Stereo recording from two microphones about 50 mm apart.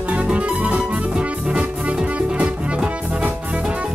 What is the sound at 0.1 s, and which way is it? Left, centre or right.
Music, right.